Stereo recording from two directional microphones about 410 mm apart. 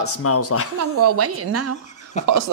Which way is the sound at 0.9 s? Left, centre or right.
Right.